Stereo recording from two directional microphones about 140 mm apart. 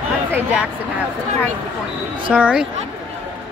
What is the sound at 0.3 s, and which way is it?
Speech, 10° right (ahead or behind).